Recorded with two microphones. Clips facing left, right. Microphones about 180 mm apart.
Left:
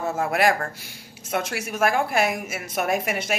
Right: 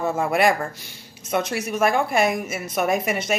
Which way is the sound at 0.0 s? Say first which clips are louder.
Right 2 dB; 5° left (ahead or behind).